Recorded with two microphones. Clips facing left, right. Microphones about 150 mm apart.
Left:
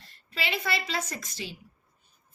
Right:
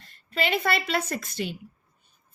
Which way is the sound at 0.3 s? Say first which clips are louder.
Right 6 dB; 50° right (ahead or behind).